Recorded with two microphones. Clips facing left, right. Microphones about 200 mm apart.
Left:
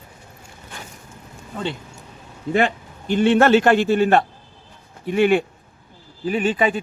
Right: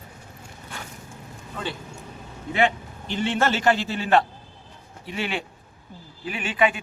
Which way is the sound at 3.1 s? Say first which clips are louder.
Left 9 dB; 60° left (ahead or behind).